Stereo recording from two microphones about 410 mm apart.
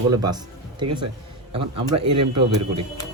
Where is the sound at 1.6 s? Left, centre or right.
Right.